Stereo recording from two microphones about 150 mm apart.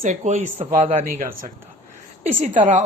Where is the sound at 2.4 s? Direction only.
55° right (ahead or behind).